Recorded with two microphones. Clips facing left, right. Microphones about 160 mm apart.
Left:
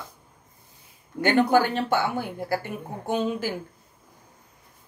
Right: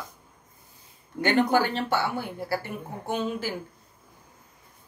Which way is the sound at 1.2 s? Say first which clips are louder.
Left 2 dB; 50° left (ahead or behind).